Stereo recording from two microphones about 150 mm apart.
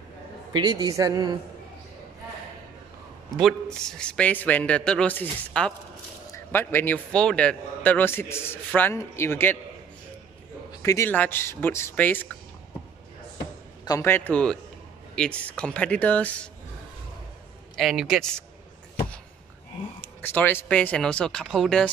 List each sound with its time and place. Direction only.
0.5 s a woman's voice: 30° right (ahead or behind)
3.3 s a man's voice: centre (ahead or behind)
10.8 s a man's voice: 20° left (ahead or behind)
13.8 s a man's voice: 20° left (ahead or behind)
17.7 s a man's voice: centre (ahead or behind)
20.0 s a man's voice: 15° left (ahead or behind)